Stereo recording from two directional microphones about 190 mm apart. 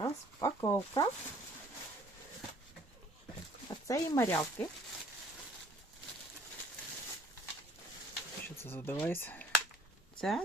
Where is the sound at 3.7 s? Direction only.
20° left (ahead or behind).